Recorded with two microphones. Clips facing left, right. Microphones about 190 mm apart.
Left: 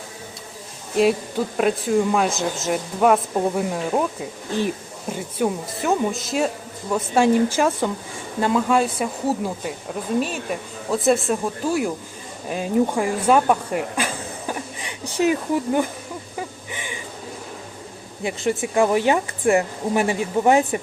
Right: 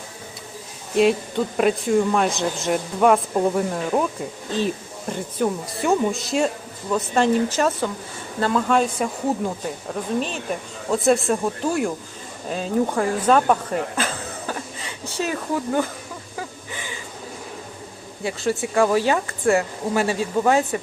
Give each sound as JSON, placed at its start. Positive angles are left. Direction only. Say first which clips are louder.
{"t": 1.5, "sound": "a woman's voice", "louder": "right 1 dB", "side_deg": 0}
{"t": 12.5, "sound": "speech", "louder": "left 2 dB", "side_deg": 15}
{"t": 16.7, "sound": "a sound", "louder": "left 1 dB", "side_deg": 15}
{"t": 18.2, "sound": "a woman's voice", "louder": "left 1 dB", "side_deg": 20}